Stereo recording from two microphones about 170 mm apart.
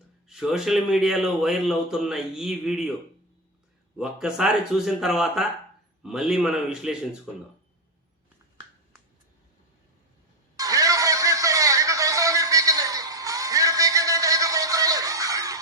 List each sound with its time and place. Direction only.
0.3 s a man's voice: 5° right (ahead or behind)
3.9 s a man's voice: 5° right (ahead or behind)
10.6 s a sound: 20° right (ahead or behind)